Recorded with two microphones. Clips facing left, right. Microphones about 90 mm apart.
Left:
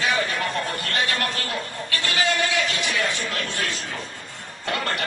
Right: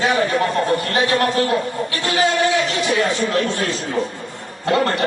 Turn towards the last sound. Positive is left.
turn(degrees=-30)  # may be behind; listen again after turning